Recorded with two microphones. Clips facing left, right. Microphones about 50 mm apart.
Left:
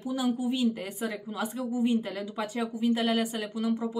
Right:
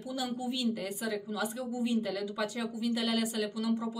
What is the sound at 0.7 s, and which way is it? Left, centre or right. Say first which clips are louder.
Speech: left 1 dB; left.